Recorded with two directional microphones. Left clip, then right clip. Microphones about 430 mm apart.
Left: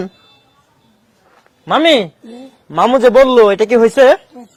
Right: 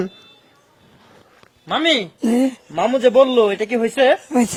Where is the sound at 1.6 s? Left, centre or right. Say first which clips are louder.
Left 7 dB; left.